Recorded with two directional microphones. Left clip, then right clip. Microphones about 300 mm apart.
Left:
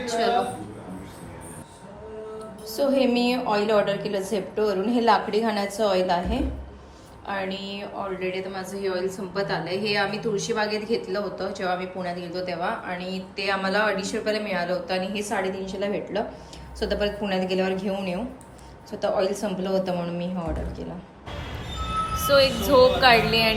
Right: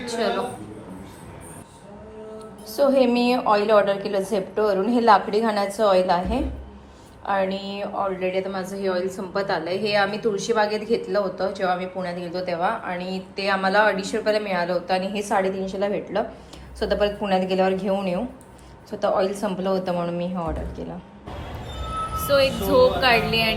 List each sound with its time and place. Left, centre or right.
0.0 s a sound: centre
2.6 s a woman's voice: centre
22.1 s a woman's voice: centre